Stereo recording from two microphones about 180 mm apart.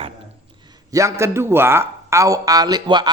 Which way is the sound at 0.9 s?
15° right (ahead or behind).